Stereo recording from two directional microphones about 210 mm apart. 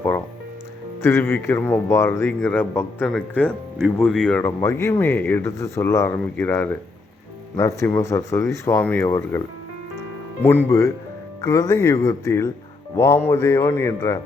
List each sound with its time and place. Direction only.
1.0 s speech: 10° left (ahead or behind)
10.7 s speech: 15° left (ahead or behind)